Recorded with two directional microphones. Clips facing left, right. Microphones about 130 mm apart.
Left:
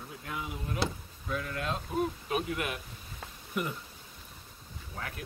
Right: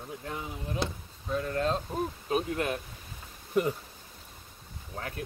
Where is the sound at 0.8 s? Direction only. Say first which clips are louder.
Left 1 dB; 25° right (ahead or behind).